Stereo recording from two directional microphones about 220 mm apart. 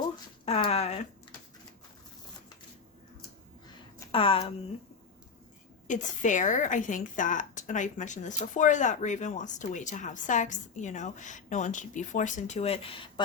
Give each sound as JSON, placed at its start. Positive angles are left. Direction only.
{"t": 0.4, "sound": "speech", "side_deg": 30}
{"t": 4.1, "sound": "speech", "side_deg": 25}
{"t": 5.9, "sound": "a woman's voice", "side_deg": 35}